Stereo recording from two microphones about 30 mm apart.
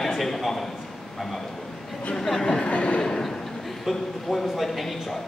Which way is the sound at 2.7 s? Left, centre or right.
Left.